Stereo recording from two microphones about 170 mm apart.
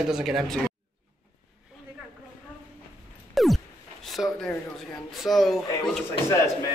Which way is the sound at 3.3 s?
Centre (ahead or behind).